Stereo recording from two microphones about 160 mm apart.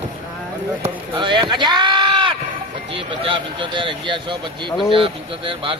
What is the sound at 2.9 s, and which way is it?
Speech, 35° right (ahead or behind).